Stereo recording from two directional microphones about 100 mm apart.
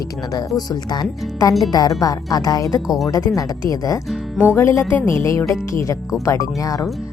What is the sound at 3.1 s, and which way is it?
Speech, 35° left (ahead or behind).